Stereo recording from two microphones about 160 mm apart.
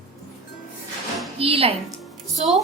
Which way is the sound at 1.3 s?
35° right (ahead or behind).